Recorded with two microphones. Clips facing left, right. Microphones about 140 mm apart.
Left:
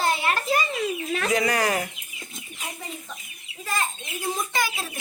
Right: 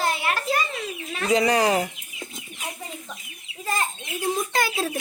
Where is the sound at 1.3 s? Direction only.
25° right (ahead or behind).